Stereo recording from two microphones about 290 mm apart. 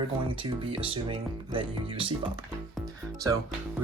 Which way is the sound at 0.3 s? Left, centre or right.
Centre.